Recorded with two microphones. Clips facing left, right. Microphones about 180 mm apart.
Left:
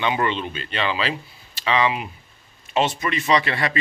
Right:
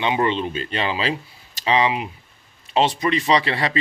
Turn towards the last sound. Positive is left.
turn(degrees=-30)  # may be behind; listen again after turning